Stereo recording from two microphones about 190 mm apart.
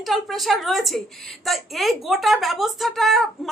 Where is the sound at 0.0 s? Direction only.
Centre (ahead or behind).